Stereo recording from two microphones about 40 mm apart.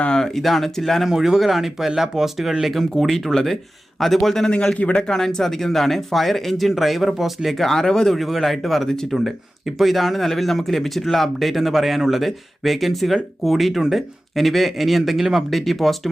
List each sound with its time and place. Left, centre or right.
0.1 s speech: centre
1.0 s speech: centre
4.4 s a man's voice: left
4.8 s speech: left
5.0 s speech: centre
9.6 s speech: centre